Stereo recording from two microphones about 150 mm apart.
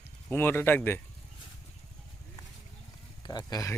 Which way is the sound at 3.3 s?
25° left (ahead or behind).